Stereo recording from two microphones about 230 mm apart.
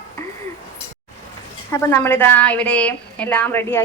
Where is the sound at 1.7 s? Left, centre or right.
Centre.